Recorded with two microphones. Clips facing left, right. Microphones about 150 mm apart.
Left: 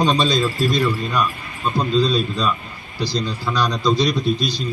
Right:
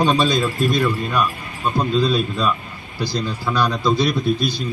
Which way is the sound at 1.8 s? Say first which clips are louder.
Even; 5° right (ahead or behind).